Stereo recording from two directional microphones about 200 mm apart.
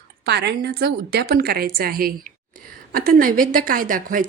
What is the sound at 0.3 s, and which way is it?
A woman's voice, 55° right (ahead or behind).